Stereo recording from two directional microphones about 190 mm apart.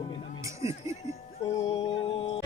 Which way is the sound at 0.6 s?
15° right (ahead or behind).